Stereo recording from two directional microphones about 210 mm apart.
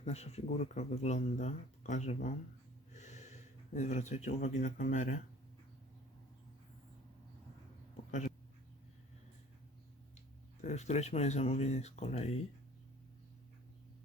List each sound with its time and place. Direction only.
0.0 s speech: 30° left (ahead or behind)
2.9 s gasp: 35° left (ahead or behind)
3.8 s speech: 35° left (ahead or behind)
10.6 s speech: 35° left (ahead or behind)